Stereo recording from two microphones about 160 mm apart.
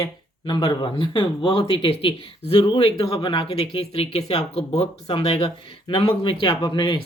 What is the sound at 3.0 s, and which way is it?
Speech, 20° left (ahead or behind).